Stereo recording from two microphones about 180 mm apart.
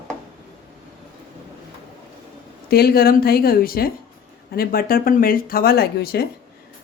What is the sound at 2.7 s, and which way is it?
Speech, 60° left (ahead or behind).